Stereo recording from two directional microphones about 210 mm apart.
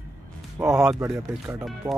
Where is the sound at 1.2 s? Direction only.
15° right (ahead or behind).